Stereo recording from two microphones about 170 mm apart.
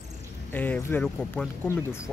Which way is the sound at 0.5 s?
10° left (ahead or behind).